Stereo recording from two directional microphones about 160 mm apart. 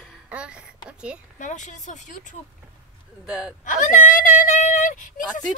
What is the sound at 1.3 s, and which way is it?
A woman's voice, 50° left (ahead or behind).